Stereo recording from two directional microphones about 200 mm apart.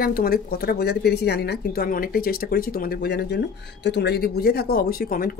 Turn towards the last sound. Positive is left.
turn(degrees=45)  # may be behind; listen again after turning